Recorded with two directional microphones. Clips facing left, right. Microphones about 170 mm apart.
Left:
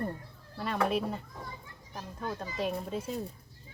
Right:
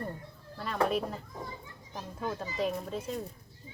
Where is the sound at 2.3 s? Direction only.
Centre (ahead or behind).